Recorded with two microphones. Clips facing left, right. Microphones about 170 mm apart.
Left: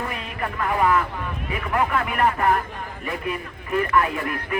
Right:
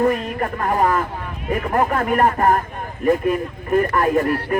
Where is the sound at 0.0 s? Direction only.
45° right (ahead or behind).